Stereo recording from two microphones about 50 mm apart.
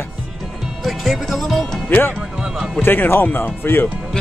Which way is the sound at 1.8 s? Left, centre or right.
Left.